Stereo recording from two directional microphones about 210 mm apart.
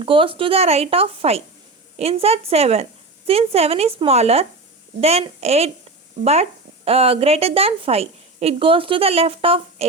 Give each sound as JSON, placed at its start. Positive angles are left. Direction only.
{"t": 0.0, "sound": "speech", "side_deg": -25}